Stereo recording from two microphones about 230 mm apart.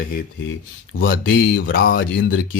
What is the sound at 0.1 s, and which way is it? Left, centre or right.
Speech, left.